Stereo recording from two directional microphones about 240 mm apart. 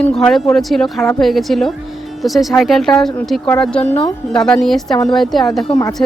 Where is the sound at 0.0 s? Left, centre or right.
Centre.